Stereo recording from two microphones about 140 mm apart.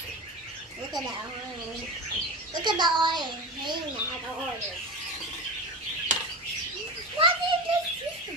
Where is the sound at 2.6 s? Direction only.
30° right (ahead or behind).